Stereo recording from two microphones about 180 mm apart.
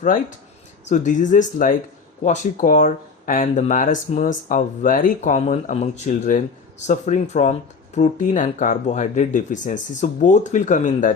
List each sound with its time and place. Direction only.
0.0 s speech: 45° left (ahead or behind)